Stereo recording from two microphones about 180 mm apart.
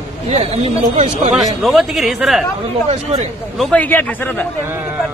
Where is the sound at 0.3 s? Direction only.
35° right (ahead or behind).